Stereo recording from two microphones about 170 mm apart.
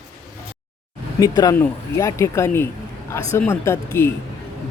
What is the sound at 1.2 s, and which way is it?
Speech, 20° left (ahead or behind).